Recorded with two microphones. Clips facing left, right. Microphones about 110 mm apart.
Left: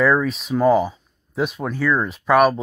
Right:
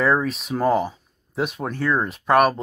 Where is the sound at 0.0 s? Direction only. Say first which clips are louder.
Left 2 dB; centre (ahead or behind).